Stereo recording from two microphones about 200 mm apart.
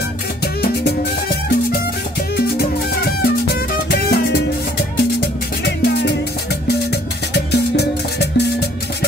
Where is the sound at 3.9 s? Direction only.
50° left (ahead or behind).